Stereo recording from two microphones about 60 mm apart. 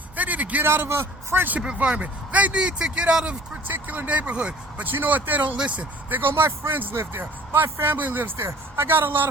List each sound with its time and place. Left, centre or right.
0.2 s a sound: right
0.6 s speech: right
1.5 s speech: centre
3.7 s speech: right
4.9 s speech: right
6.3 s a man's voice: right
6.9 s speech: right
8.4 s speech: right
8.8 s speech: right